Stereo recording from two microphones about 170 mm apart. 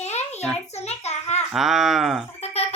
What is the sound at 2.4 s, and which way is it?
Music, 40° left (ahead or behind).